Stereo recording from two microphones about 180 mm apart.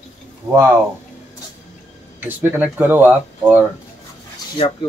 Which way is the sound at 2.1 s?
10° right (ahead or behind).